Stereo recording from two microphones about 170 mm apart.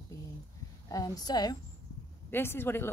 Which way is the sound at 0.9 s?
20° left (ahead or behind).